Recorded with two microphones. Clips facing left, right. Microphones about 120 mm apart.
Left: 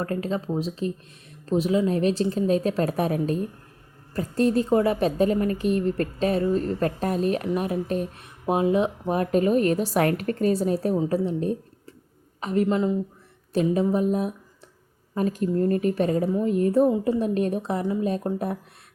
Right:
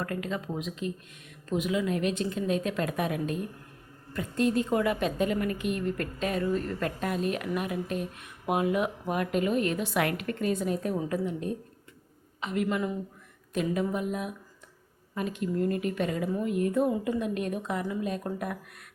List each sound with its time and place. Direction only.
0.0 s a woman's voice: 35° left (ahead or behind)
12.6 s a woman's voice: 25° left (ahead or behind)